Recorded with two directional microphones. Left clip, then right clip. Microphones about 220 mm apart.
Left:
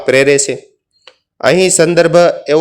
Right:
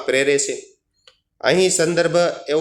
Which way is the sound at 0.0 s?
40° left (ahead or behind).